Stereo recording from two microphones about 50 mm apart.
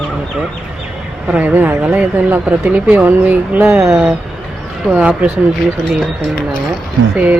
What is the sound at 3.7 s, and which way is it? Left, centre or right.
Speech, right.